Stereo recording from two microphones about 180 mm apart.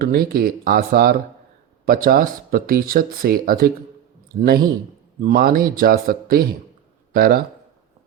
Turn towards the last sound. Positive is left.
turn(degrees=-55)  # may be behind; listen again after turning